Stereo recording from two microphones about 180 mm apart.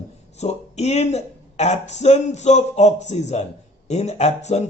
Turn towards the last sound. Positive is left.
turn(degrees=40)  # may be behind; listen again after turning